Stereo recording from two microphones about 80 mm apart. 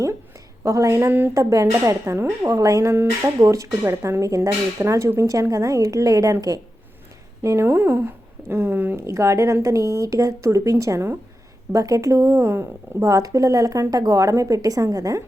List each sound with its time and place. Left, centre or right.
0.6 s speech: right
2.5 s speech: right
7.4 s speech: right